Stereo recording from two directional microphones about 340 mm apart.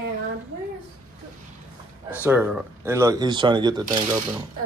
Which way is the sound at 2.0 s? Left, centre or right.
Centre.